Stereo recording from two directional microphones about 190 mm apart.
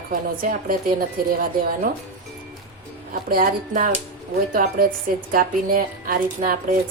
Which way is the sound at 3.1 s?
45° right (ahead or behind).